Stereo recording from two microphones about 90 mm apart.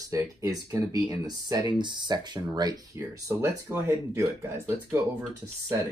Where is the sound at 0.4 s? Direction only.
40° right (ahead or behind).